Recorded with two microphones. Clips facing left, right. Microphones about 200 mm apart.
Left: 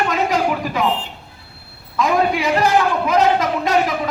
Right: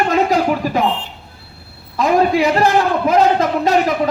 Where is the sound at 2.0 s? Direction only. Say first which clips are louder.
Right 4 dB; 35° right (ahead or behind).